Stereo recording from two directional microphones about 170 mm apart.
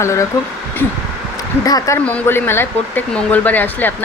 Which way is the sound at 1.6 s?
20° left (ahead or behind).